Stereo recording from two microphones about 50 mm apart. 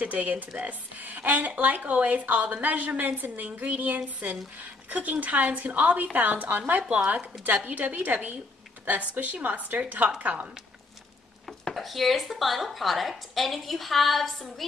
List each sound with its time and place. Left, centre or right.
0.0 s a woman's voice: right
11.7 s a woman's voice: centre